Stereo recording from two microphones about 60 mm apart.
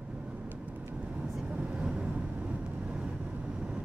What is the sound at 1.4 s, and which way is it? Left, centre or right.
Vehicle, centre.